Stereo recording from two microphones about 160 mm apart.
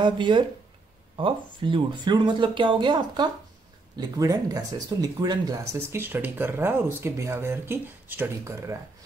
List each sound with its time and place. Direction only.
0.0 s speech: 30° right (ahead or behind)